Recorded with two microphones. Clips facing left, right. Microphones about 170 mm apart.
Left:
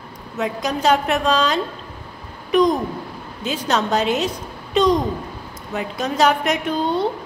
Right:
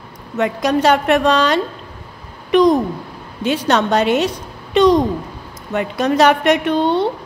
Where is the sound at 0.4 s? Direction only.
75° right (ahead or behind).